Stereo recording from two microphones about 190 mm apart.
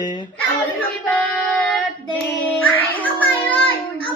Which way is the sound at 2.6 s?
10° left (ahead or behind).